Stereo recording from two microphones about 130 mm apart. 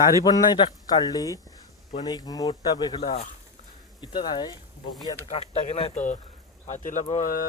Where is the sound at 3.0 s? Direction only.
55° left (ahead or behind).